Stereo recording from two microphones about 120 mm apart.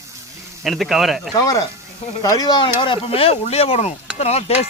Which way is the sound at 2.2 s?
30° left (ahead or behind).